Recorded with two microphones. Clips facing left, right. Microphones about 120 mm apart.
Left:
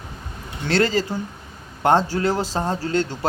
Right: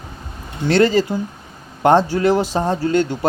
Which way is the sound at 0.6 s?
20° right (ahead or behind).